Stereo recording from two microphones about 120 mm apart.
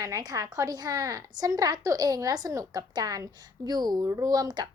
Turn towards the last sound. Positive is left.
turn(degrees=-35)  # may be behind; listen again after turning